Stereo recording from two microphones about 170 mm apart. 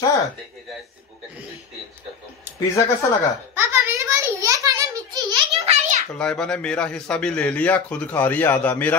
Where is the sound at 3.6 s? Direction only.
15° right (ahead or behind).